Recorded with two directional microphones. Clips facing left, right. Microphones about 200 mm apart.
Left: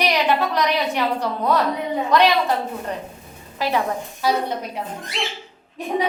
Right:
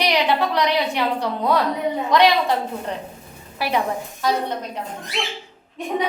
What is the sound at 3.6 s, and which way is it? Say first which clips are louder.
Speech: even; 15° right (ahead or behind).